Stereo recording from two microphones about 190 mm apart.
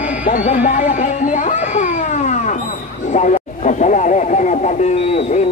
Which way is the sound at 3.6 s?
40° left (ahead or behind).